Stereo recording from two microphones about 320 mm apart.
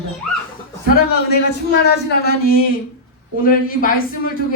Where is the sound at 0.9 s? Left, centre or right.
Left.